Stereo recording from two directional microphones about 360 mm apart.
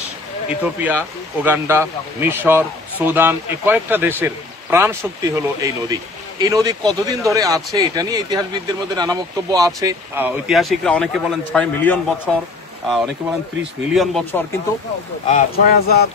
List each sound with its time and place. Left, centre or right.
0.5 s speech: centre
15.2 s speech: left